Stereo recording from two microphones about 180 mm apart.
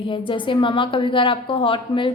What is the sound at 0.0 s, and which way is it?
A woman's voice, 25° left (ahead or behind).